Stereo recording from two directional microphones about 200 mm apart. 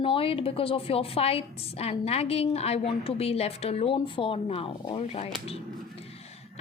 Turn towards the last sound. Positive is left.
turn(degrees=30)  # may be behind; listen again after turning